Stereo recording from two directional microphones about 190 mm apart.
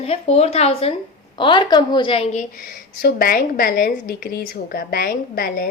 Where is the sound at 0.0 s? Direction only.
35° left (ahead or behind); by 5.7 s 50° left (ahead or behind).